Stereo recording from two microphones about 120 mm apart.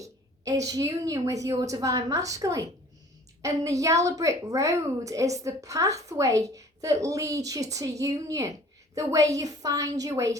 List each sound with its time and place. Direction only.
0.0 s a woman's voice: 30° right (ahead or behind)